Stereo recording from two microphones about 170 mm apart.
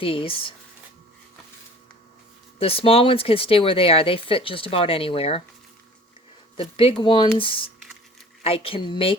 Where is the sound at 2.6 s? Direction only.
35° left (ahead or behind).